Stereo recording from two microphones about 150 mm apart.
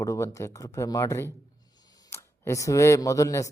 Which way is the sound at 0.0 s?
20° left (ahead or behind).